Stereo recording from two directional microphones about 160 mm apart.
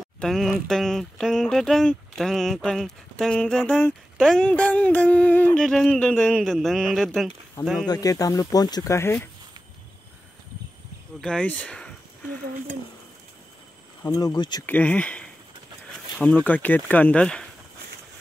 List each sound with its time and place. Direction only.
0.2 s speech: centre (ahead or behind)
7.8 s speech: 25° left (ahead or behind)
11.1 s speech: 5° left (ahead or behind)
14.0 s speech: 25° left (ahead or behind)
14.7 s speech: 10° left (ahead or behind)